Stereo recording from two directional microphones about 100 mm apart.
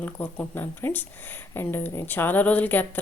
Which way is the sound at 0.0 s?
15° left (ahead or behind).